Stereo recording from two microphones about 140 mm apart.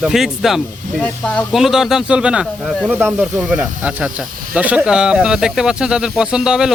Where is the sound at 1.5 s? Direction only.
Centre (ahead or behind).